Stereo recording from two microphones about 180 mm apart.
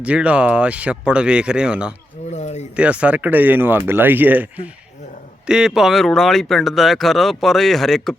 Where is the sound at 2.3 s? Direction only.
40° left (ahead or behind).